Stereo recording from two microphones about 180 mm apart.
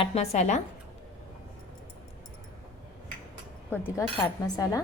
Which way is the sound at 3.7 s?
10° left (ahead or behind).